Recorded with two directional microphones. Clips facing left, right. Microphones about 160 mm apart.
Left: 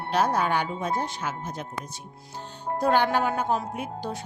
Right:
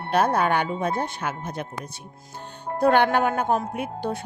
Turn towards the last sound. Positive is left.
turn(degrees=-60)  # may be behind; listen again after turning